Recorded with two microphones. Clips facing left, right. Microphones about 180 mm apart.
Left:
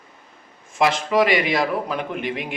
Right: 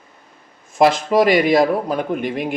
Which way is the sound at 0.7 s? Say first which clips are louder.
Right 4 dB; 40° right (ahead or behind).